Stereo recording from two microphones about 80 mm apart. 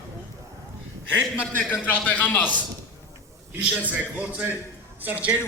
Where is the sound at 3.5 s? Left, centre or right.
Centre.